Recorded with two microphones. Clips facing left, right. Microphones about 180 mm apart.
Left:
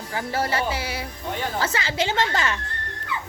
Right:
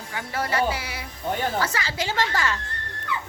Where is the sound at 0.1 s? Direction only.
30° left (ahead or behind).